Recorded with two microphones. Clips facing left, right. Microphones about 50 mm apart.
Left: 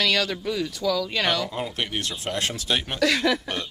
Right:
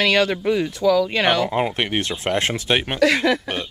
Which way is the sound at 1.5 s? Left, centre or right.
Right.